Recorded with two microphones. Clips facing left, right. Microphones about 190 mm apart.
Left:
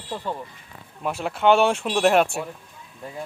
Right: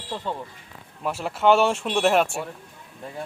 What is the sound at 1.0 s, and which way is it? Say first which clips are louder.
Speech: even; centre (ahead or behind).